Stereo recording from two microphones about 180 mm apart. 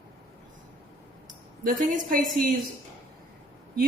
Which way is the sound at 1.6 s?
45° right (ahead or behind).